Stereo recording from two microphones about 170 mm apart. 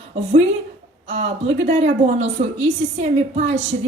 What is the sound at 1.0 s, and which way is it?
A woman's voice, 40° right (ahead or behind).